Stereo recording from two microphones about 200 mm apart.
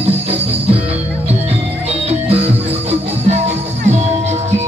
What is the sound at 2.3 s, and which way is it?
Music, 30° right (ahead or behind).